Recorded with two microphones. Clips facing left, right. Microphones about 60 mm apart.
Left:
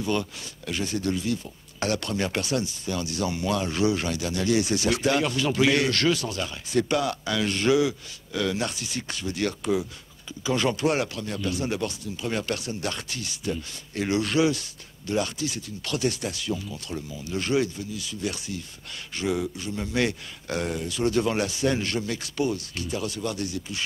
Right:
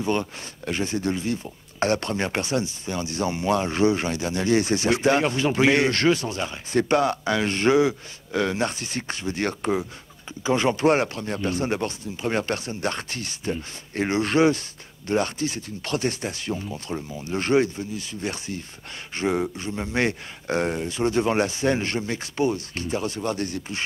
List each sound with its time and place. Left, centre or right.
0.0 s speech: right